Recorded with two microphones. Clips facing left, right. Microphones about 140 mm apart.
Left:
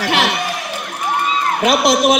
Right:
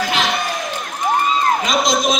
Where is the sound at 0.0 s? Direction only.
65° left (ahead or behind).